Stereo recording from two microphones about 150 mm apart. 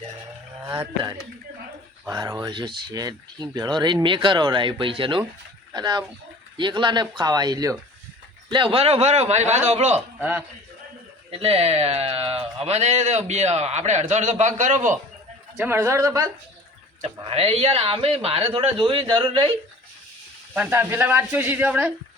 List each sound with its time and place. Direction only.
2.0 s speech: 20° right (ahead or behind); by 10.0 s 45° right (ahead or behind)
10.2 s speech: 10° right (ahead or behind)
11.3 s speech: 40° right (ahead or behind)
15.5 s speech: 15° right (ahead or behind)
17.0 s speech: 40° right (ahead or behind)
20.5 s speech: 10° right (ahead or behind)